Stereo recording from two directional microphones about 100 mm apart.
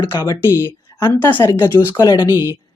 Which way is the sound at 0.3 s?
25° left (ahead or behind).